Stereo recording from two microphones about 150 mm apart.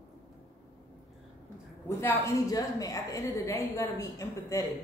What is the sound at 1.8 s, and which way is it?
A woman's voice, 20° left (ahead or behind).